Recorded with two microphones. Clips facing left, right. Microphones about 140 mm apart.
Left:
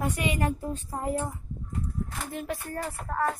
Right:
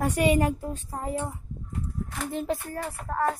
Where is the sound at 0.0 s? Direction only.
40° right (ahead or behind).